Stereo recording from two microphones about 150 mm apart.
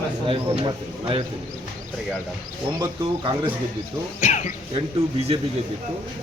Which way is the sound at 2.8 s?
35° right (ahead or behind).